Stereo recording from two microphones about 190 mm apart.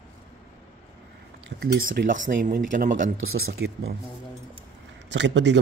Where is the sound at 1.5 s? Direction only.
55° right (ahead or behind).